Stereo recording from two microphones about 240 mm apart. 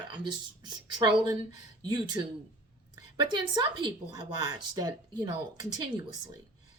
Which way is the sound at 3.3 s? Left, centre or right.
Centre.